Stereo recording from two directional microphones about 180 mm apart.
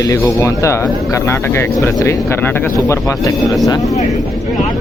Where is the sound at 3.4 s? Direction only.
Centre (ahead or behind).